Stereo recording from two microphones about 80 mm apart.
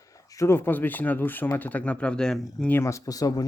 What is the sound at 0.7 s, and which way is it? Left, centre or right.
Speech, left.